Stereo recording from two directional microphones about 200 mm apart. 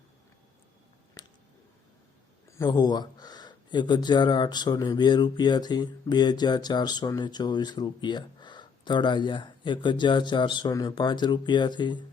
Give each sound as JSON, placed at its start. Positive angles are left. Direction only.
{"t": 2.5, "sound": "speech", "side_deg": 15}